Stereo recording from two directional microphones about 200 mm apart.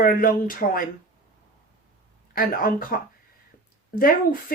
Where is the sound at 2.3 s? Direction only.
45° left (ahead or behind).